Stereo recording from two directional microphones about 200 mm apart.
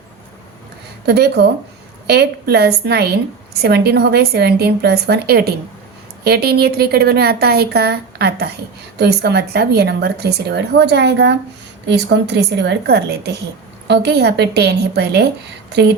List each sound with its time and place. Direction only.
1.0 s a woman's voice: 55° right (ahead or behind)